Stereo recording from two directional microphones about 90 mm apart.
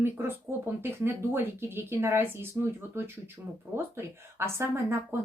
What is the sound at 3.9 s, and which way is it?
Speech, 25° right (ahead or behind).